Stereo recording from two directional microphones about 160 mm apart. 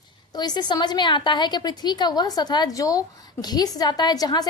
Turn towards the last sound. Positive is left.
turn(degrees=25)  # may be behind; listen again after turning